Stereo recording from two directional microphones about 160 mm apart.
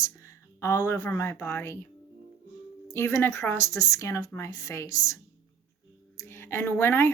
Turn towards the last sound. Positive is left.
turn(degrees=15)  # may be behind; listen again after turning